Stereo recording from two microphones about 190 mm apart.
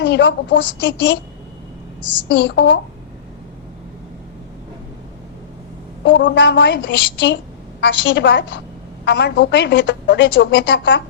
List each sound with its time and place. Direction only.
0.0 s a woman's voice: 65° left (ahead or behind)
2.3 s a woman's voice: 70° left (ahead or behind)
6.1 s a woman's voice: 75° left (ahead or behind)